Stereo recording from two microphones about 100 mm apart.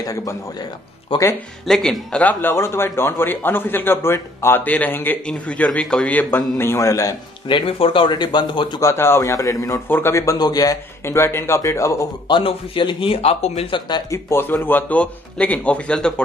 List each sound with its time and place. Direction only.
0.0 s a man's voice: 35° left (ahead or behind)
1.1 s speech: 60° left (ahead or behind)
1.7 s speech: 5° left (ahead or behind)
2.5 s a man's voice: 25° left (ahead or behind)
7.4 s speech: 60° left (ahead or behind)
8.8 s a man's voice: 25° left (ahead or behind)
9.8 s a man's voice: 20° left (ahead or behind)
10.4 s a man's voice: 40° left (ahead or behind)
11.1 s a man's voice: 25° left (ahead or behind)
12.3 s speech: 55° left (ahead or behind)
14.1 s a man's voice: 25° left (ahead or behind); by 16.1 s 10° left (ahead or behind)